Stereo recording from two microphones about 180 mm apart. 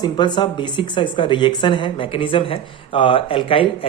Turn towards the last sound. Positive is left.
turn(degrees=30)  # may be behind; listen again after turning